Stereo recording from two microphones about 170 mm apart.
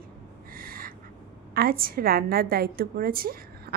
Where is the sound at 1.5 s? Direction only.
65° right (ahead or behind).